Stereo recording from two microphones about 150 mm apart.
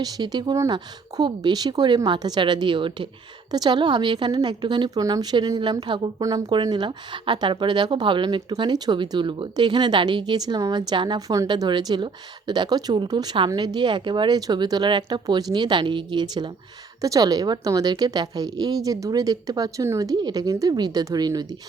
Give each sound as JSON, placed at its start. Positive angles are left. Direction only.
{"t": 0.0, "sound": "a woman's voice", "side_deg": -25}